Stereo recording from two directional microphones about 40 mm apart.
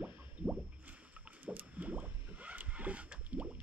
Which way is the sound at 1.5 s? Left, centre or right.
Right.